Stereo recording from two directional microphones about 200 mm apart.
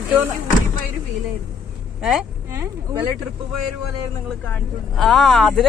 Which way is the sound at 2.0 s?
5° right (ahead or behind).